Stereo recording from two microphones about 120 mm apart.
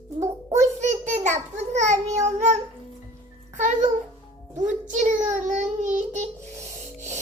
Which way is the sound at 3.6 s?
90° right.